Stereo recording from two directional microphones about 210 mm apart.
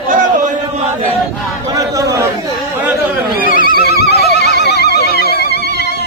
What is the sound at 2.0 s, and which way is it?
Chatter, 15° right (ahead or behind).